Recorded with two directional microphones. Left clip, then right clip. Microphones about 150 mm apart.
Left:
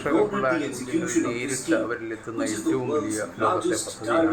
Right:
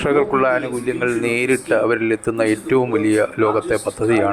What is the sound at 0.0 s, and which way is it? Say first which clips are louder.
Speech: right 7 dB; 50° right (ahead or behind).